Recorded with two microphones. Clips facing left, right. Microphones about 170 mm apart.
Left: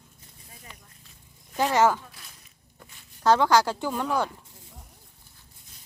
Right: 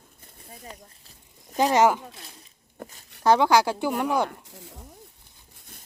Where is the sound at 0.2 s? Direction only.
55° right (ahead or behind).